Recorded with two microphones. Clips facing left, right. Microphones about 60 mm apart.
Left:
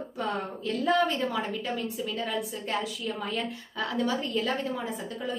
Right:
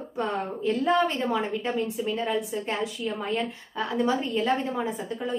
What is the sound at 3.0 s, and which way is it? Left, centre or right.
Speech, centre.